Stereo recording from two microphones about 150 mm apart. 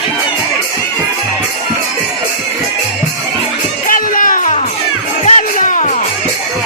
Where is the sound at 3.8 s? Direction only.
65° left (ahead or behind).